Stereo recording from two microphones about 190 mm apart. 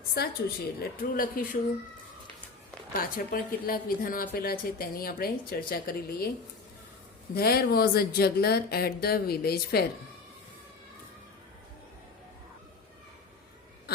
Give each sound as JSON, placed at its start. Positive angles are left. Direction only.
{"t": 0.2, "sound": "speech", "side_deg": 55}
{"t": 2.9, "sound": "speech", "side_deg": 50}
{"t": 7.3, "sound": "speech", "side_deg": 55}